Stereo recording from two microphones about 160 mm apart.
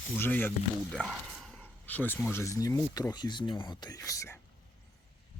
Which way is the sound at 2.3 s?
20° left (ahead or behind).